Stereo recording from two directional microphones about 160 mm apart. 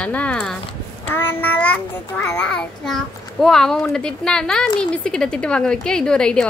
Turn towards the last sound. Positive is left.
turn(degrees=5)  # may be behind; listen again after turning